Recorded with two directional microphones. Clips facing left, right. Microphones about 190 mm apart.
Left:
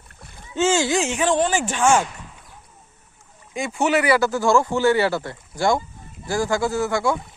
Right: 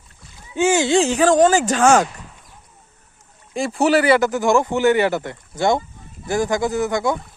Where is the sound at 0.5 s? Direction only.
15° right (ahead or behind).